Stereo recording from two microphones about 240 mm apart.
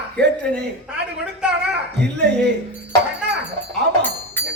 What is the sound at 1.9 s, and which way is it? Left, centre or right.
Speech, right.